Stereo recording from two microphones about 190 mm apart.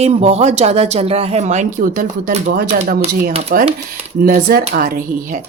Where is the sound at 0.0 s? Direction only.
35° right (ahead or behind); by 3.6 s 50° right (ahead or behind).